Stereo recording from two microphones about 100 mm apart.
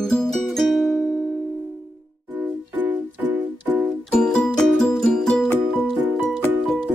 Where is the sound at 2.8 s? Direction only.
15° right (ahead or behind).